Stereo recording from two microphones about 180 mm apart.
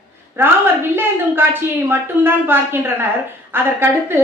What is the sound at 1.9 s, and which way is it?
A woman's voice, 10° right (ahead or behind).